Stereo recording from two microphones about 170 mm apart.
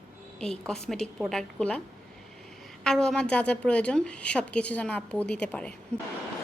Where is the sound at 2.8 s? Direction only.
5° left (ahead or behind).